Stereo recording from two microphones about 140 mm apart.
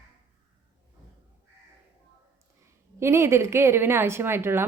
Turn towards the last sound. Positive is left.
turn(degrees=-15)  # may be behind; listen again after turning